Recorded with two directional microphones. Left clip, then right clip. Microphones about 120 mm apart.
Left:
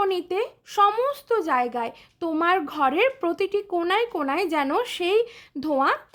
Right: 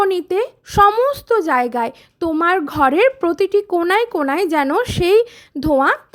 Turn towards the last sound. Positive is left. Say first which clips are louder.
# right 7 dB
turn(degrees=-40)  # may be behind; listen again after turning